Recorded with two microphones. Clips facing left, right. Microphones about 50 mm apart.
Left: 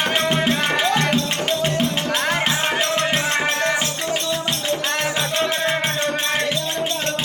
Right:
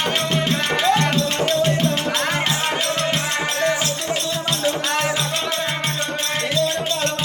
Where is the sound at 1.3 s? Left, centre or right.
Centre.